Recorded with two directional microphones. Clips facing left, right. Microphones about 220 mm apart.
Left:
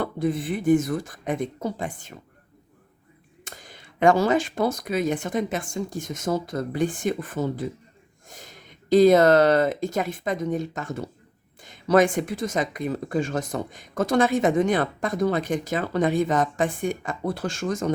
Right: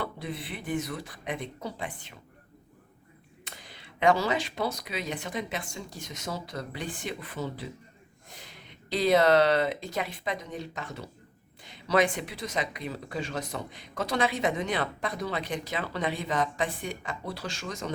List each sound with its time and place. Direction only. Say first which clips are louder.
0.0 s speech: left 10 dB; 45° left (ahead or behind)
3.4 s speech: left 4 dB; 45° left (ahead or behind)